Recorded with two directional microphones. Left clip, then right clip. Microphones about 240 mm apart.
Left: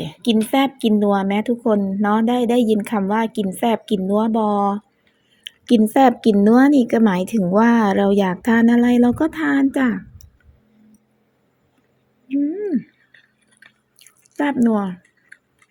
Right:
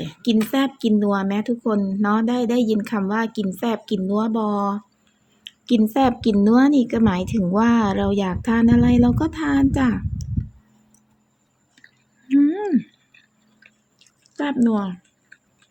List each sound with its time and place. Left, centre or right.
0.0 s a woman's voice: centre
0.5 s a woman's voice: centre
5.4 s a sound: centre
5.9 s a woman's voice: centre
12.3 s speech: centre
14.0 s drip: centre